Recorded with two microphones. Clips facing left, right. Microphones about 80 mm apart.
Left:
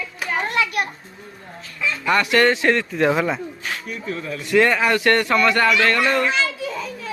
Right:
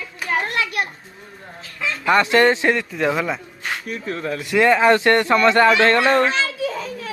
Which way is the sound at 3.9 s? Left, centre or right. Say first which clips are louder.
Right 4 dB; right.